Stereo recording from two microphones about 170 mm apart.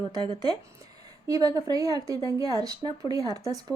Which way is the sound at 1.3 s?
20° right (ahead or behind).